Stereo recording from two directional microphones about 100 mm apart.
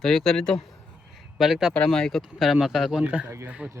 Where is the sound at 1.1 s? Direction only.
Centre (ahead or behind).